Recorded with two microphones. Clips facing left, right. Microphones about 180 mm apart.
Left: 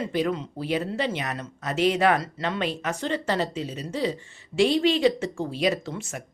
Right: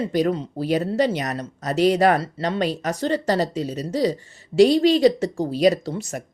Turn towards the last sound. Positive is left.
turn(degrees=-35)  # may be behind; listen again after turning